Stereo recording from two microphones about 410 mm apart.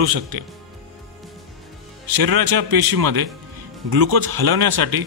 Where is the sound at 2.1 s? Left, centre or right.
Right.